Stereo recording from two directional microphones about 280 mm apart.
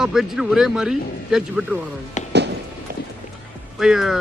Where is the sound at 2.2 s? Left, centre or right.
Left.